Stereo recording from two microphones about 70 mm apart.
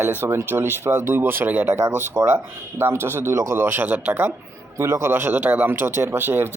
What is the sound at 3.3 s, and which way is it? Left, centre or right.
Speech, right.